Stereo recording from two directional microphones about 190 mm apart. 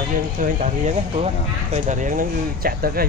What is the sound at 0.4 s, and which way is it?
Speech, 35° right (ahead or behind).